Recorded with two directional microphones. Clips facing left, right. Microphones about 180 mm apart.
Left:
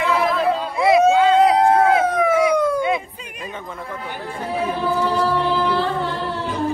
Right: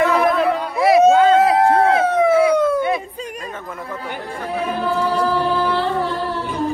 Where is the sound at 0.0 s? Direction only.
55° right (ahead or behind).